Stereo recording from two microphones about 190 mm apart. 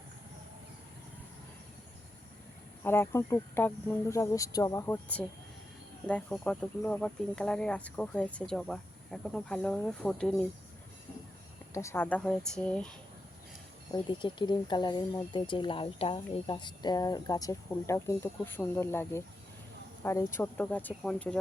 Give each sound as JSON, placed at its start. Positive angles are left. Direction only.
{"t": 2.8, "sound": "speech", "side_deg": 10}
{"t": 11.7, "sound": "speech", "side_deg": 15}
{"t": 13.9, "sound": "speech", "side_deg": 25}